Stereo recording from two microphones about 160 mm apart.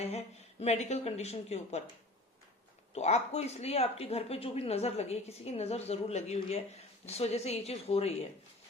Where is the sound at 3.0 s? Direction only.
45° left (ahead or behind).